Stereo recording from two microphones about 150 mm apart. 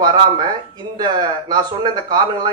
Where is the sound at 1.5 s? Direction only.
25° right (ahead or behind).